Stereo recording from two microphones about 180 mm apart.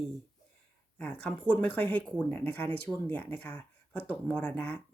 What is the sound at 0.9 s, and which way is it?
Speech, 5° left (ahead or behind).